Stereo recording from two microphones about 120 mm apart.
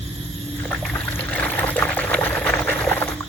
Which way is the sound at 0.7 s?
15° left (ahead or behind).